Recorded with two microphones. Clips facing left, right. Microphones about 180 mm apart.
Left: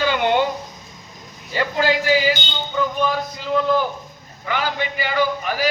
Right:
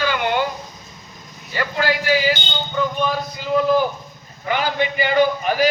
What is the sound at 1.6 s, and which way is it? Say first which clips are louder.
Speech: left 2 dB; 20° left (ahead or behind).